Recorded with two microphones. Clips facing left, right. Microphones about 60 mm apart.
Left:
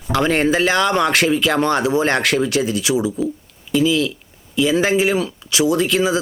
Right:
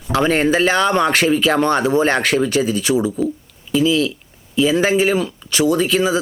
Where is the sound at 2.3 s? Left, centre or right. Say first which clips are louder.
Right 1 dB; centre.